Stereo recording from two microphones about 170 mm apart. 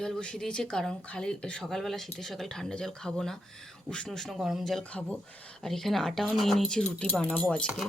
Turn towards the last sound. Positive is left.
turn(degrees=10)  # may be behind; listen again after turning